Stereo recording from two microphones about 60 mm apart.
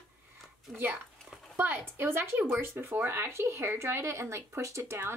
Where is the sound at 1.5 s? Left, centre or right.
Right.